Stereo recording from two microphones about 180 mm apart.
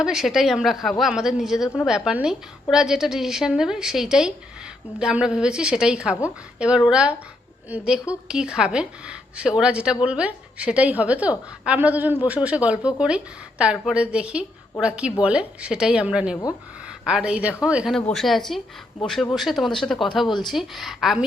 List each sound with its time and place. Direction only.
0.0 s a woman's voice: centre (ahead or behind)
20.2 s speech: 25° left (ahead or behind)
20.5 s a woman's voice: centre (ahead or behind)